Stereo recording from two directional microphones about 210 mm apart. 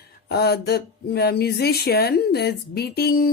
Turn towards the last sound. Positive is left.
turn(degrees=45)  # may be behind; listen again after turning